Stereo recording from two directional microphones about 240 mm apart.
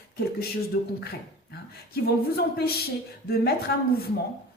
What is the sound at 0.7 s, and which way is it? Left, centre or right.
A woman's voice, left.